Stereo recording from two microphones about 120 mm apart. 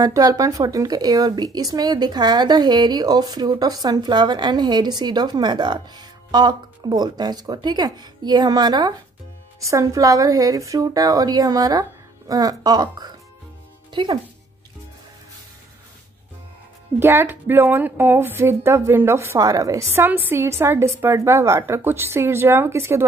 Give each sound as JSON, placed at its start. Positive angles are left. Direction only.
{"t": 0.0, "sound": "a woman's voice", "side_deg": -30}
{"t": 17.0, "sound": "a woman's voice", "side_deg": -20}